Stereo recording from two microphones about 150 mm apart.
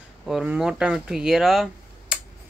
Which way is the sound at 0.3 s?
Centre (ahead or behind).